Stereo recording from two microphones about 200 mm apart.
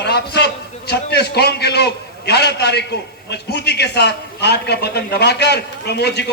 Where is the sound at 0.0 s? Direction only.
55° left (ahead or behind).